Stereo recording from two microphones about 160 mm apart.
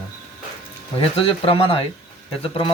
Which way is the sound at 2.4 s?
35° left (ahead or behind).